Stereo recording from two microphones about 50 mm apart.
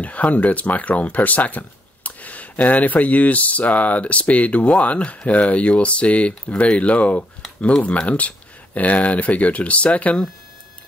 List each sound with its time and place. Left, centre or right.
0.0 s speech: left